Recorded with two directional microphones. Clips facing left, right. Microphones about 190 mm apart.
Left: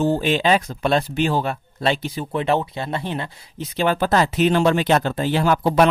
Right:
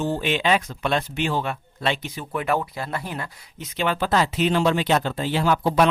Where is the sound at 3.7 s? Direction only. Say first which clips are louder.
Left 3 dB; 40° left (ahead or behind).